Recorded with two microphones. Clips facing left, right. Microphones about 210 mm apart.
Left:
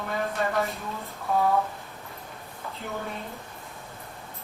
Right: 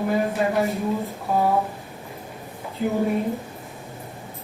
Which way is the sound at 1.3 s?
25° right (ahead or behind).